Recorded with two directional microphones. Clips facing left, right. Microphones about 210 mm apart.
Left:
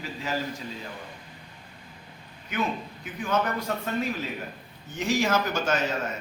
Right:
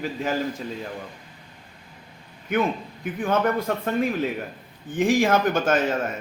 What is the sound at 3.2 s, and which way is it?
A man's voice, 55° right (ahead or behind).